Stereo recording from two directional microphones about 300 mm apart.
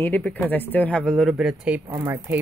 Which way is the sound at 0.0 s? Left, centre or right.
Centre.